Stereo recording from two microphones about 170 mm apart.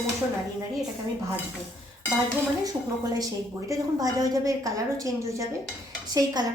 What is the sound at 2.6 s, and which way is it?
A woman's voice, 20° right (ahead or behind).